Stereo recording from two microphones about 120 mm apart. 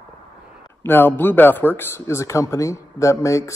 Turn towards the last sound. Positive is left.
turn(degrees=25)  # may be behind; listen again after turning